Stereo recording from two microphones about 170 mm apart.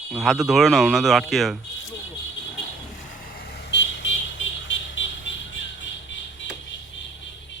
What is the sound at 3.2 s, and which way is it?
Vehicle, 65° left (ahead or behind).